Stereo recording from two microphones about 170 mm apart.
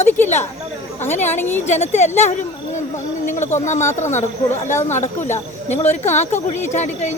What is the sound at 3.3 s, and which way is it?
Speech, 45° left (ahead or behind).